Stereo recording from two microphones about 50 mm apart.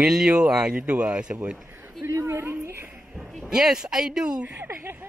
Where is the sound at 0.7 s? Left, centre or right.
Right.